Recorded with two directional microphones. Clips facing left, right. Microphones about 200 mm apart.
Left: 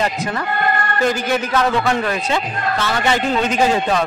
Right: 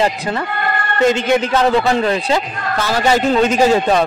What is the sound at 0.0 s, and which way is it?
A man's voice, 30° right (ahead or behind).